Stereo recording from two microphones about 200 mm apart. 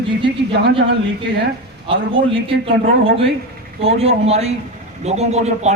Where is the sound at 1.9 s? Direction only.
25° right (ahead or behind).